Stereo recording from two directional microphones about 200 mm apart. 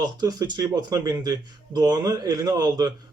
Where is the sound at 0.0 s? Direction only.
20° right (ahead or behind).